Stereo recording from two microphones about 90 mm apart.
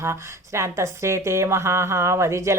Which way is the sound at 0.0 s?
30° right (ahead or behind).